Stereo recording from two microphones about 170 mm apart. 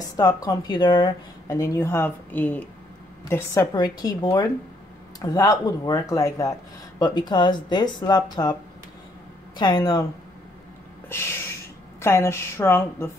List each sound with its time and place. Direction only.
0.2 s speech: 20° left (ahead or behind)
9.6 s speech: 25° left (ahead or behind)
11.1 s a woman's voice: 15° left (ahead or behind)